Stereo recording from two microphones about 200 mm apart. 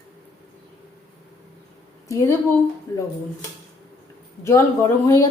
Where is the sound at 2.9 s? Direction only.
15° left (ahead or behind).